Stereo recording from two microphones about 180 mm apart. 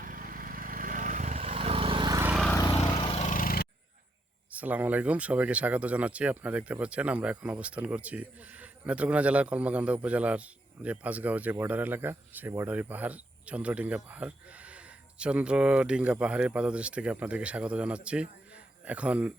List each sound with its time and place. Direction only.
0.0 s vehicle: 50° right (ahead or behind); by 2.2 s 25° right (ahead or behind)
2.8 s vehicle: 30° left (ahead or behind); by 3.7 s 55° left (ahead or behind)
4.5 s speech: 10° right (ahead or behind)